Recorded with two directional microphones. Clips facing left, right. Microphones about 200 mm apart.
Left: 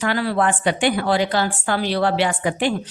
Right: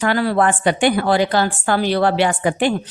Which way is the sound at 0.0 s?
50° right (ahead or behind).